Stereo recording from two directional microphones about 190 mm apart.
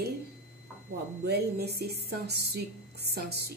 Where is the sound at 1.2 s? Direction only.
60° right (ahead or behind).